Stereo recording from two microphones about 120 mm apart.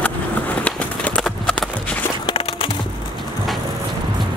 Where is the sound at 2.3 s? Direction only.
50° left (ahead or behind).